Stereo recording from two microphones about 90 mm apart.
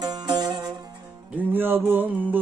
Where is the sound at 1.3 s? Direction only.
20° right (ahead or behind).